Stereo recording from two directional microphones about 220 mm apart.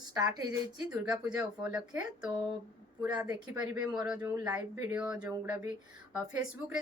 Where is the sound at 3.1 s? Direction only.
20° right (ahead or behind).